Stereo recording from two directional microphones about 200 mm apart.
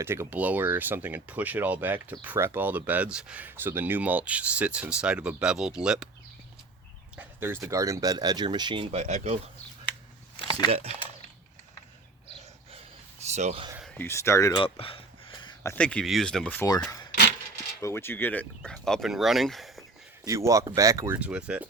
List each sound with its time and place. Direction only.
0.0 s speech: 10° right (ahead or behind)
7.2 s a sound: 10° right (ahead or behind)
7.7 s speech: 15° right (ahead or behind); by 9.4 s 35° right (ahead or behind)
10.3 s a sound: 25° left (ahead or behind)
13.3 s speech: 30° right (ahead or behind)
13.7 s a sound: 5° left (ahead or behind); by 15.7 s 20° left (ahead or behind)
15.7 s speech: 5° left (ahead or behind)
17.7 s speech: 15° left (ahead or behind)
20.2 s speech: 15° right (ahead or behind)